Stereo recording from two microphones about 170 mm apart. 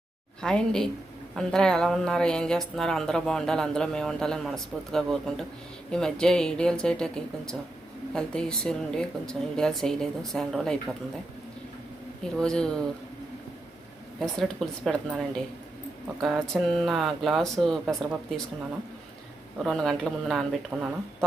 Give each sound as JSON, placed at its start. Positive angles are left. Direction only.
{"t": 0.4, "sound": "a woman's voice", "side_deg": 5}
{"t": 12.2, "sound": "a woman's voice", "side_deg": 5}
{"t": 14.2, "sound": "a woman's voice", "side_deg": 5}
{"t": 16.2, "sound": "a woman's voice", "side_deg": 0}
{"t": 19.6, "sound": "a woman's voice", "side_deg": 0}